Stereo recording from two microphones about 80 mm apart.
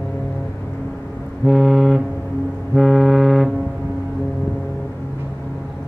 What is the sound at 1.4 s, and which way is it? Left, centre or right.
Vehicle, centre.